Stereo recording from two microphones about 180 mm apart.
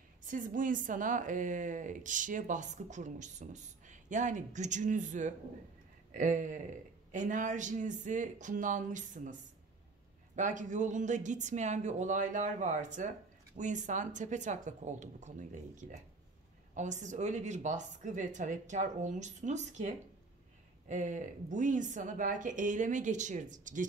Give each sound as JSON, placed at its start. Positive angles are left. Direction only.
{"t": 0.3, "sound": "speech", "side_deg": -50}
{"t": 10.3, "sound": "speech", "side_deg": -45}
{"t": 20.9, "sound": "speech", "side_deg": -45}